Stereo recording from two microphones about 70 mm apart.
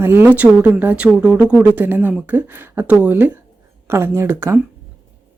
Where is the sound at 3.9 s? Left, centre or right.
Right.